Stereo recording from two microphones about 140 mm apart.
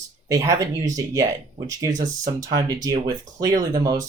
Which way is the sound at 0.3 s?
25° right (ahead or behind).